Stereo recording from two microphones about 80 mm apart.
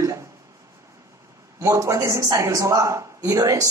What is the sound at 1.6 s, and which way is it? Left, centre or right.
A man's voice, right.